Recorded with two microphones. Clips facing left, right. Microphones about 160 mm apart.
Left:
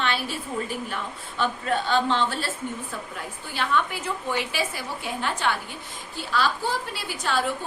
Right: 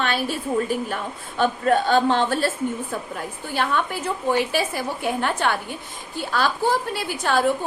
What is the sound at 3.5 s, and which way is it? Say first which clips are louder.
A woman's voice: right 2 dB; 45° right (ahead or behind).